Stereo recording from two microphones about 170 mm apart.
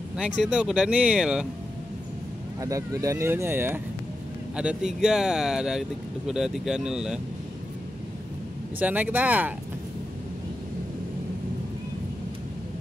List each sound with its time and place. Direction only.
0.2 s speech: 5° right (ahead or behind)
2.6 s speech: 20° right (ahead or behind); by 7.2 s 5° right (ahead or behind)
8.7 s speech: 10° right (ahead or behind)